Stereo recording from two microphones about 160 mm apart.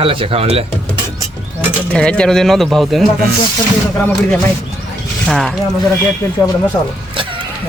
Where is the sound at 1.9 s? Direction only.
5° left (ahead or behind).